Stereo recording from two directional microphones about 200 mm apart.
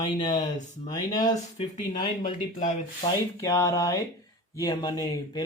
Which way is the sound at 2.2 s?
40° left (ahead or behind).